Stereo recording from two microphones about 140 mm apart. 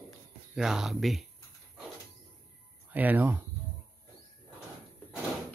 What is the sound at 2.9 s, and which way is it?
Speech, 10° right (ahead or behind).